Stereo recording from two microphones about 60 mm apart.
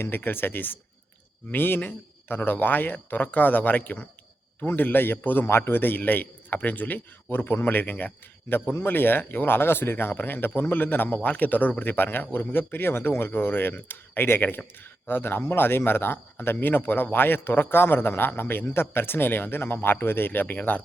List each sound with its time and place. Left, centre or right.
0.0 s speech: left
5.5 s speech: left